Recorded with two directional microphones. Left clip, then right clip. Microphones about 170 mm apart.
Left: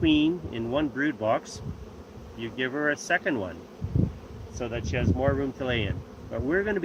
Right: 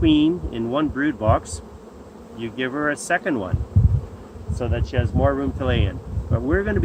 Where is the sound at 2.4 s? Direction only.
15° right (ahead or behind).